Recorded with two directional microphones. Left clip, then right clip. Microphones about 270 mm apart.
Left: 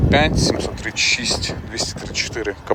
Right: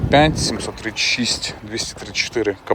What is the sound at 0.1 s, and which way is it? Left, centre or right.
Speech, centre.